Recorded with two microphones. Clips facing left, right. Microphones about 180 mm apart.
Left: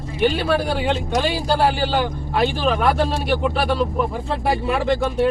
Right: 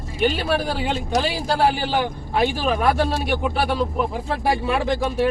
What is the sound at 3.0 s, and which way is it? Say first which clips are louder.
Speech: left 2 dB; centre (ahead or behind).